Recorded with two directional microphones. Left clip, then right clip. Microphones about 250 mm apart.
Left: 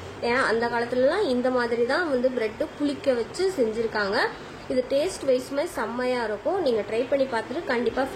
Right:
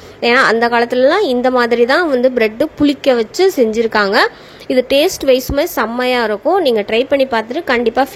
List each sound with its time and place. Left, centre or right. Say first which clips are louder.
0.2 s a woman's voice: right 12 dB; right